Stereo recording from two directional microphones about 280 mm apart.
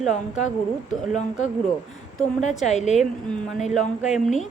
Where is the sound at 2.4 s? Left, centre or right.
Left.